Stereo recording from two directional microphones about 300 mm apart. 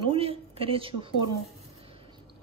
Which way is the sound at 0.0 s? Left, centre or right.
Centre.